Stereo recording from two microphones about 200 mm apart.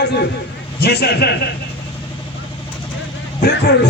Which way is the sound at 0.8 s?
55° left (ahead or behind).